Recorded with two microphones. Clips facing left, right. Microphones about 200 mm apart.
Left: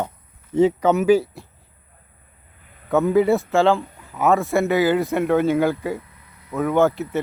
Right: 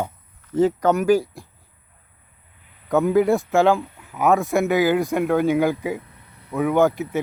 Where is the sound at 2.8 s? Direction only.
Centre (ahead or behind).